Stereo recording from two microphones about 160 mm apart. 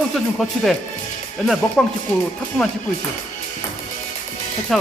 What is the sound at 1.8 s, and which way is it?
Speech, 5° left (ahead or behind).